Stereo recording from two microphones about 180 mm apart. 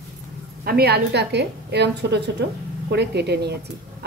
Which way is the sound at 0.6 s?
60° right (ahead or behind).